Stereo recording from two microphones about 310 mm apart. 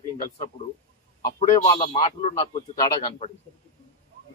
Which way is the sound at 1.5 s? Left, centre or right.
Centre.